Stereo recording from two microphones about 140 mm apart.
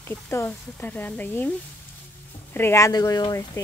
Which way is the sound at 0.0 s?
15° left (ahead or behind).